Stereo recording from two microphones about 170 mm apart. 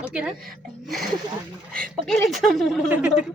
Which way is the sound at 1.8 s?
5° left (ahead or behind).